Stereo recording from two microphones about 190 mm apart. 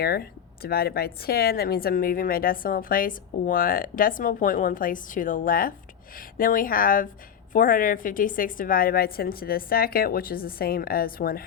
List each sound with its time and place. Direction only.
0.0 s a woman's voice: 55° left (ahead or behind)